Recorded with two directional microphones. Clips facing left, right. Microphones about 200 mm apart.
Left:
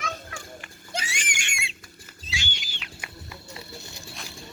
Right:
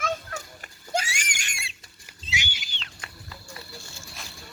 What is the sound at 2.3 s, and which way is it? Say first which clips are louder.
Pig: right 1 dB; 15° right (ahead or behind).